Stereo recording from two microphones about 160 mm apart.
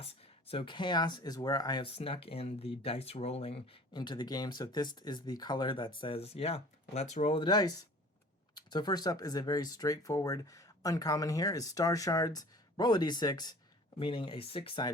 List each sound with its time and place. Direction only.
0.0 s speech: 40° left (ahead or behind)
7.3 s speech: 25° left (ahead or behind)